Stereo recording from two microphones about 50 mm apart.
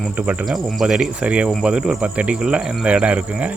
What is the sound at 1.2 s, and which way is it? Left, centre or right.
Speech, right.